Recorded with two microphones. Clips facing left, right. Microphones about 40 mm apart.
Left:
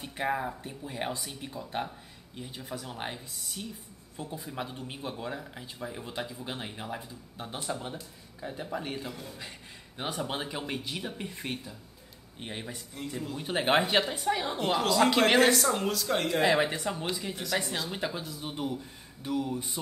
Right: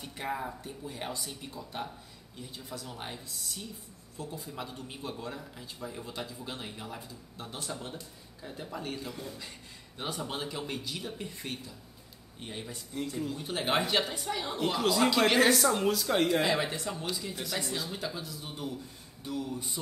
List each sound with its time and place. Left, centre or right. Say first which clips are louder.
0.0 s speech: left 4 dB; left
9.1 s a woman's voice: right 1 dB; centre
9.9 s speech: left 2 dB; left
12.9 s a woman's voice: right 4 dB; centre
13.4 s speech: left 5 dB; left
15.3 s a woman's voice: left 1 dB; centre
16.5 s speech: left 4 dB; left